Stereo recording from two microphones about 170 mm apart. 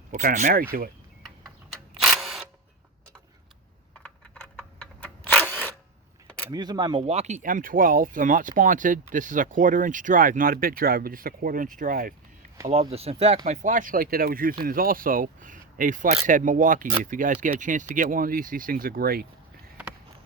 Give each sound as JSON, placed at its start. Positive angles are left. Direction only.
{"t": 0.1, "sound": "speech", "side_deg": -50}
{"t": 1.5, "sound": "camera", "side_deg": 0}
{"t": 4.0, "sound": "camera", "side_deg": 10}
{"t": 6.5, "sound": "speech", "side_deg": -25}
{"t": 12.9, "sound": "speech", "side_deg": -35}